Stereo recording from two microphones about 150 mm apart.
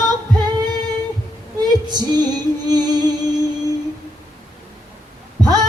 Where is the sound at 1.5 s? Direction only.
25° right (ahead or behind).